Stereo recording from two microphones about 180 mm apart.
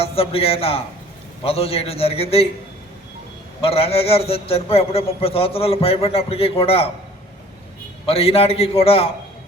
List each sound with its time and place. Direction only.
0.0 s a man's voice: 30° left (ahead or behind)
3.6 s a man's voice: 35° left (ahead or behind)
8.0 s a man's voice: 35° left (ahead or behind)